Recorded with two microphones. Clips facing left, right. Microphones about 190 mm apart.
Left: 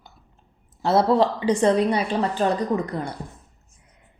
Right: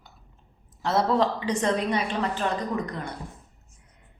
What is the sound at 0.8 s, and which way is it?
A woman's voice, 30° left (ahead or behind).